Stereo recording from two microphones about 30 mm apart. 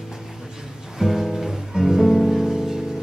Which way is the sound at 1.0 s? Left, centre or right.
Centre.